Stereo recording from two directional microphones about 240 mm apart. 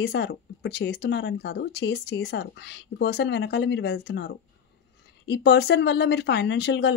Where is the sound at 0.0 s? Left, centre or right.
Left.